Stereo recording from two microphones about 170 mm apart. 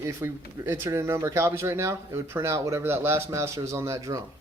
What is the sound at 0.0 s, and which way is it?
Speech, 15° right (ahead or behind).